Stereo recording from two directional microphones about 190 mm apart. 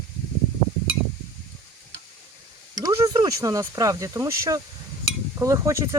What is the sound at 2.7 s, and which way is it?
Speech, 20° right (ahead or behind).